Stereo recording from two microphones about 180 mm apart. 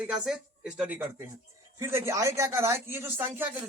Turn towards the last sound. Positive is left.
turn(degrees=-15)  # may be behind; listen again after turning